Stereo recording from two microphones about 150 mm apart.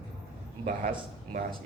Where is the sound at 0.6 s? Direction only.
65° right (ahead or behind).